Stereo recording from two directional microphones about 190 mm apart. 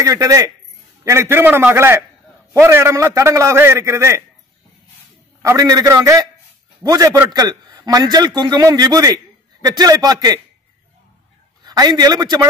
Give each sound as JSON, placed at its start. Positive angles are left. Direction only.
{"t": 0.0, "sound": "a man's voice", "side_deg": -15}
{"t": 5.4, "sound": "a man's voice", "side_deg": -15}
{"t": 11.6, "sound": "a man's voice", "side_deg": -20}